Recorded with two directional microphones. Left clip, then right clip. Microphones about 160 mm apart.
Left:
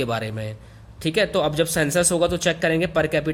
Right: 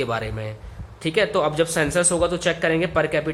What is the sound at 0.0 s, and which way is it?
Speech, 35° left (ahead or behind).